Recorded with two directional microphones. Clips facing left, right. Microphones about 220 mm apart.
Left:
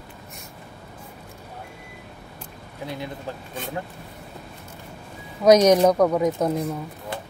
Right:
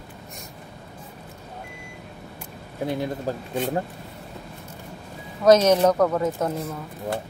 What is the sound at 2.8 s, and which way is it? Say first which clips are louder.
Speech: right 6 dB; 50° right (ahead or behind).